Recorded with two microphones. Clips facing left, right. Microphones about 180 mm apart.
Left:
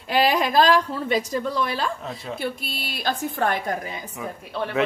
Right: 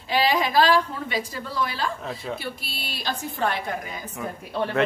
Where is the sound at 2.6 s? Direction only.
50° left (ahead or behind).